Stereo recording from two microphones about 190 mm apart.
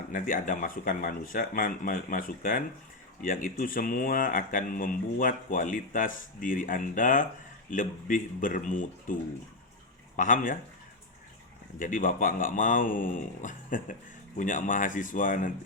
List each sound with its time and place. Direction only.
0.1 s speech: 45° left (ahead or behind)
10.2 s speech: 45° left (ahead or behind)
11.8 s speech: 45° left (ahead or behind)